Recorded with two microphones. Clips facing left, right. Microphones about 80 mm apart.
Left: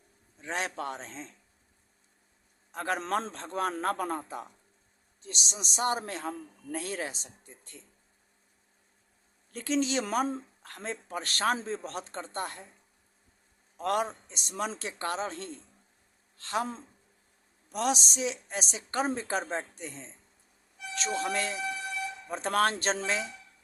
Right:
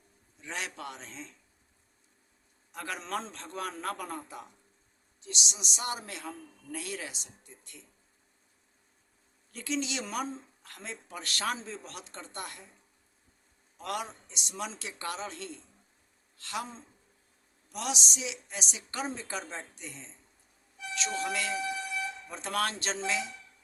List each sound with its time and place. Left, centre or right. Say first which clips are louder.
0.4 s a man's voice: left 5 dB; left
2.7 s a man's voice: left 7 dB; left
3.0 s a man's voice: left 5 dB; left
3.3 s a man's voice: left 6 dB; left
9.5 s a man's voice: left 5 dB; left
13.7 s a man's voice: left 7 dB; left
17.7 s a man's voice: left 6 dB; left